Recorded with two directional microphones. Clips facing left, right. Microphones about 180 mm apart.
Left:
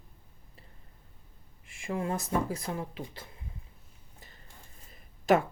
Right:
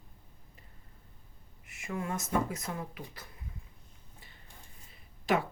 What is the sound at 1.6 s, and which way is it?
Speech, 30° left (ahead or behind).